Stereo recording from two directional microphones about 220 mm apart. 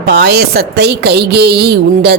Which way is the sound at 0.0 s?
45° right (ahead or behind).